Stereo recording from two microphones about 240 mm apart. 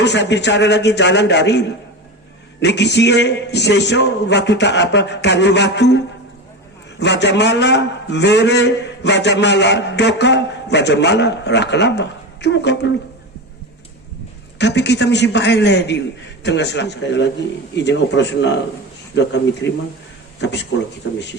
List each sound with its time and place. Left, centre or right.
0.0 s a man's voice: left
7.0 s a man's voice: left
14.6 s a man's voice: left